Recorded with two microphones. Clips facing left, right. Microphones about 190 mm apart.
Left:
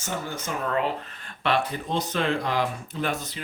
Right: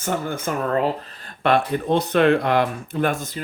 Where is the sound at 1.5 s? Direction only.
55° right (ahead or behind).